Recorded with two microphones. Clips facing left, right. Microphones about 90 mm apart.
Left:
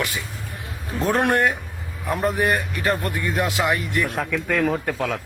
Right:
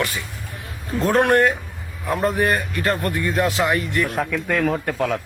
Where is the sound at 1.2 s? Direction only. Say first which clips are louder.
Right 5 dB; 15° left (ahead or behind).